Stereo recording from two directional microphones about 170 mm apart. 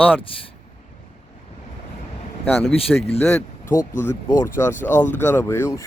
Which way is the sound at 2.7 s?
35° left (ahead or behind).